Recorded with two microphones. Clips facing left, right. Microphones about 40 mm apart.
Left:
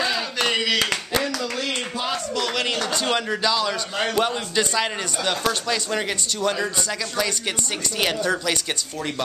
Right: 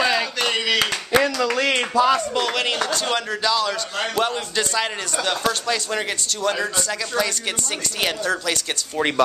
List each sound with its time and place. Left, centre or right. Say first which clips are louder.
0.0 s a sound: right 3 dB; centre
1.2 s speech: right 6 dB; right
2.4 s speech: right 2 dB; centre
2.9 s a man's voice: even; centre